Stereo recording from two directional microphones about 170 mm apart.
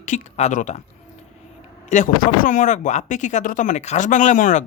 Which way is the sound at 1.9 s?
50° left (ahead or behind).